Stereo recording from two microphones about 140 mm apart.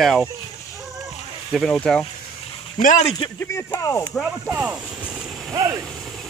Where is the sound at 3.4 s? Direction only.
20° left (ahead or behind).